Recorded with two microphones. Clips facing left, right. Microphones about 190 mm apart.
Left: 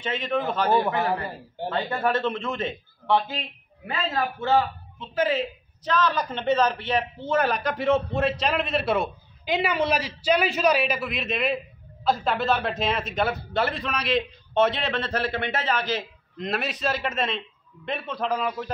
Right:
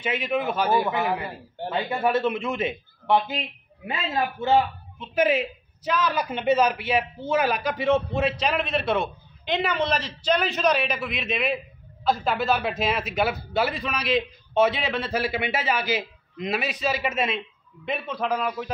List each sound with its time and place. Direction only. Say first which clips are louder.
0.0 s a man's voice: right 1 dB; 10° right (ahead or behind)